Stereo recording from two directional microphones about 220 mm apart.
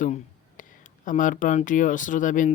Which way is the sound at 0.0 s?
35° left (ahead or behind).